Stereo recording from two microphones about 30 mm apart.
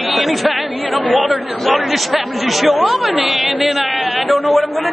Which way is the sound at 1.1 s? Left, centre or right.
Right.